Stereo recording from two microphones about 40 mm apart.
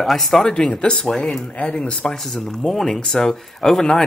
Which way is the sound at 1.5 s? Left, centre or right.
Left.